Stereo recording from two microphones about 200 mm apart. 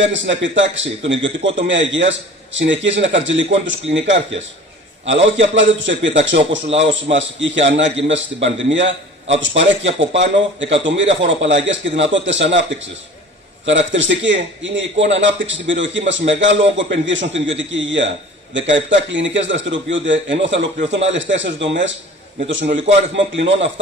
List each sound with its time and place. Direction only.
0.0 s a man's voice: 65° right (ahead or behind)
13.7 s a man's voice: 65° right (ahead or behind)
22.8 s a man's voice: 65° right (ahead or behind)